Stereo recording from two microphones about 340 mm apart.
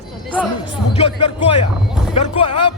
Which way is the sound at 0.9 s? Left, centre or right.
Centre.